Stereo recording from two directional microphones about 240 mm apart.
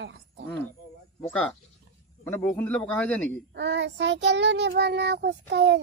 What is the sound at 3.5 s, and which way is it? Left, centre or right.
Child singing, right.